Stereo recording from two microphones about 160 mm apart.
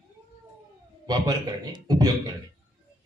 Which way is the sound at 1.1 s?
25° right (ahead or behind).